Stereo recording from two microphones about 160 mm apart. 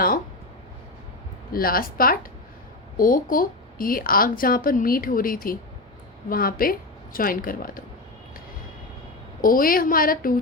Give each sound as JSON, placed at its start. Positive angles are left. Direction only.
{"t": 1.5, "sound": "a woman's voice", "side_deg": 65}
{"t": 9.4, "sound": "speech", "side_deg": 60}